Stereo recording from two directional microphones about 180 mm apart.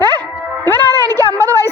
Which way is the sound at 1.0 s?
20° right (ahead or behind).